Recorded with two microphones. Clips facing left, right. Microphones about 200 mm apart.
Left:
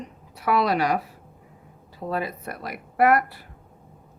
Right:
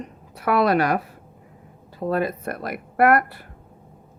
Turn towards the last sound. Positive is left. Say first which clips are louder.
# right 2 dB
turn(degrees=-55)  # may be behind; listen again after turning